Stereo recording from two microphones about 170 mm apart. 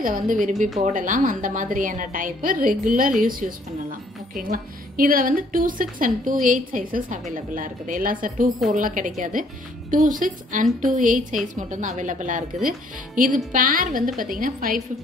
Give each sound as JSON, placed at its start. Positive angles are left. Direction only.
{"t": 0.0, "sound": "a woman's voice", "side_deg": -50}